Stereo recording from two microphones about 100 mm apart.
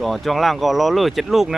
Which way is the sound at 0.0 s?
Centre (ahead or behind).